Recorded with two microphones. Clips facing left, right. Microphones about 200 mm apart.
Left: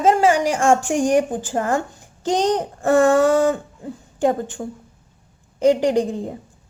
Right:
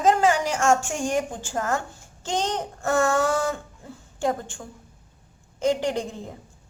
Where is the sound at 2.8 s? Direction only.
35° left (ahead or behind).